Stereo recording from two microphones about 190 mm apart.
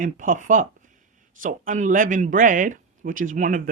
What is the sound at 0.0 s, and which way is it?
Speech, 45° right (ahead or behind).